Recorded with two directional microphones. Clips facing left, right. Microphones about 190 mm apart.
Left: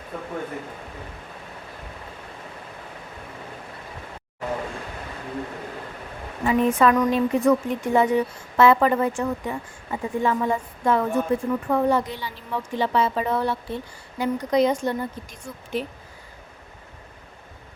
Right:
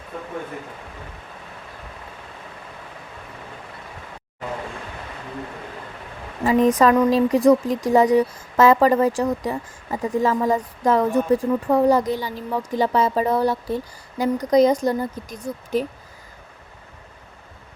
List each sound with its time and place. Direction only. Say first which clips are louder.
6.4 s a woman's voice: right 3 dB; 35° right (ahead or behind)